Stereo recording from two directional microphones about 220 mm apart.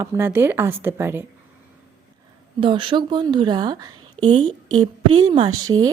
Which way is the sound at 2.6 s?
25° right (ahead or behind).